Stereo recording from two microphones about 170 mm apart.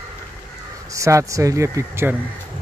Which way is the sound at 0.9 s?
20° right (ahead or behind).